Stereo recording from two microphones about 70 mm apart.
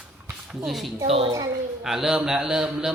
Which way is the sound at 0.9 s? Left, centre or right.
Right.